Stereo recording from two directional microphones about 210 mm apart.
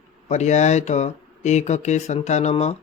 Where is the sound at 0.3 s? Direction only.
35° left (ahead or behind).